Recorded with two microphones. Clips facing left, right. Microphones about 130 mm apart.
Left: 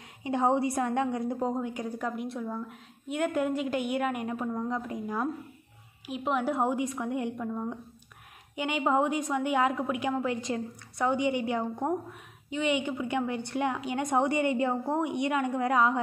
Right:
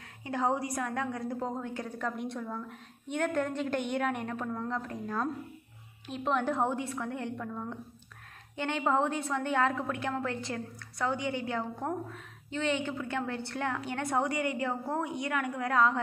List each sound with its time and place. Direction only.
0.2 s a woman's voice: 25° left (ahead or behind)